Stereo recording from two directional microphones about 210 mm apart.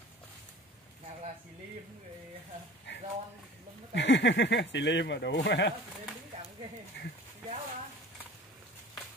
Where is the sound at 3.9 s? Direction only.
60° left (ahead or behind).